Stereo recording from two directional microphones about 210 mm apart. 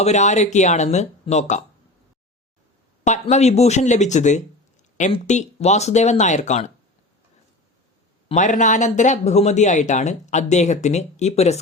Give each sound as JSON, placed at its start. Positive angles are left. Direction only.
{"t": 0.0, "sound": "speech", "side_deg": 35}
{"t": 3.0, "sound": "speech", "side_deg": 35}
{"t": 8.3, "sound": "speech", "side_deg": 35}